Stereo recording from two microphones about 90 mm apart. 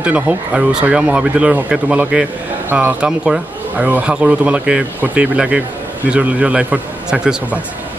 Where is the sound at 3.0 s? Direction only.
10° right (ahead or behind).